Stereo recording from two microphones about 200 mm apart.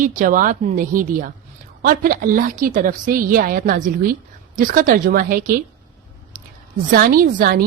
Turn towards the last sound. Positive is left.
turn(degrees=-45)  # may be behind; listen again after turning